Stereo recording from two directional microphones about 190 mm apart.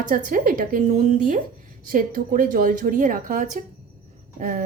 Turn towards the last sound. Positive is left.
turn(degrees=-45)  # may be behind; listen again after turning